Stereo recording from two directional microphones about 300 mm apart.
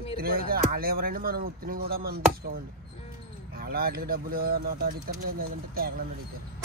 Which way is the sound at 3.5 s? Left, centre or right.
Right.